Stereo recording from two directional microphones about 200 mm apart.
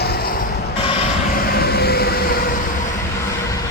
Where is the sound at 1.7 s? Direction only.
50° left (ahead or behind).